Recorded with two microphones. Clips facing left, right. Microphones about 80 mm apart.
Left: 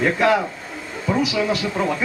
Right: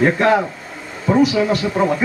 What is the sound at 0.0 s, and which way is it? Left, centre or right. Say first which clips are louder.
Speech: right 3 dB; right.